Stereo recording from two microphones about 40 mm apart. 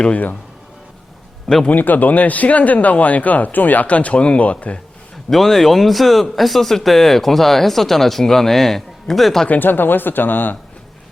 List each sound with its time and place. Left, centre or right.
1.6 s speech: left
3.8 s speech: left
5.3 s speech: centre
9.6 s speech: left